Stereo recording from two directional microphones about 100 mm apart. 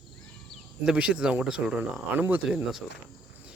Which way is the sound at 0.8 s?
10° right (ahead or behind).